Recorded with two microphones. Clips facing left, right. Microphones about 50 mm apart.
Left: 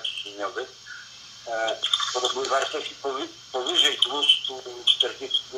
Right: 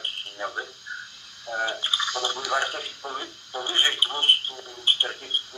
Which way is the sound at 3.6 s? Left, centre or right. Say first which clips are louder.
Right 1 dB; right.